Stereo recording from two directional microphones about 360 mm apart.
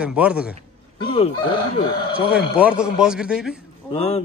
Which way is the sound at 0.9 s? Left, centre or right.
Centre.